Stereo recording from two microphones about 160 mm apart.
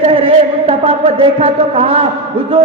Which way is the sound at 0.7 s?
35° right (ahead or behind).